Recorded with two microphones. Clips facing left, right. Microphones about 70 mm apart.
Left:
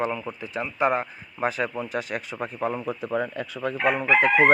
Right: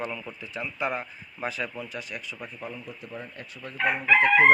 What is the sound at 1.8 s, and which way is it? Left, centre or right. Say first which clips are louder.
Speech: left 7 dB; left.